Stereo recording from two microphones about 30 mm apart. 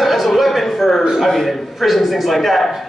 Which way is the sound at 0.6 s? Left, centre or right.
Centre.